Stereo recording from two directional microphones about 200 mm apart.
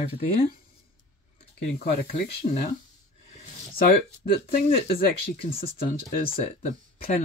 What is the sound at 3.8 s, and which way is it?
Speech, 45° left (ahead or behind).